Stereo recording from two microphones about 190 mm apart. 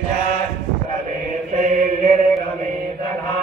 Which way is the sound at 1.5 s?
45° right (ahead or behind).